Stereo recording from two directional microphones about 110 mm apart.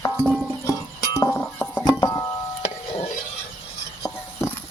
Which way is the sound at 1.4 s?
15° left (ahead or behind).